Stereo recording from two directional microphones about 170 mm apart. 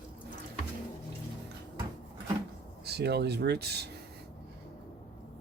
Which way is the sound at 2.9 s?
75° right (ahead or behind).